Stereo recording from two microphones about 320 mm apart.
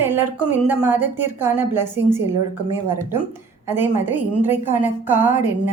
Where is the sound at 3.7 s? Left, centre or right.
Centre.